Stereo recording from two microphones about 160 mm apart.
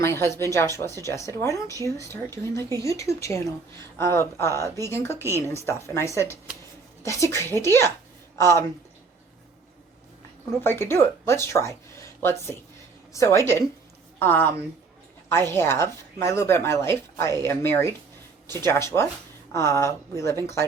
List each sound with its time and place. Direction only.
0.0 s speech: 15° left (ahead or behind)
10.6 s speech: 15° left (ahead or behind)